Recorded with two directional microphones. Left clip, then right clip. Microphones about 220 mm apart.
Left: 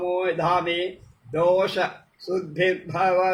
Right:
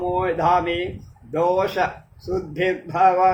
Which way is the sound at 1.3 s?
15° right (ahead or behind).